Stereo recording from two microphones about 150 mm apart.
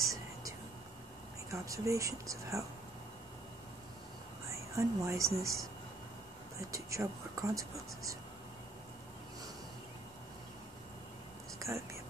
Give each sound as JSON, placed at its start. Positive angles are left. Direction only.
{"t": 0.1, "sound": "whispering", "side_deg": -25}
{"t": 1.5, "sound": "speech", "side_deg": -20}
{"t": 4.7, "sound": "speech", "side_deg": -20}
{"t": 6.7, "sound": "speech", "side_deg": -20}
{"t": 11.6, "sound": "speech", "side_deg": -20}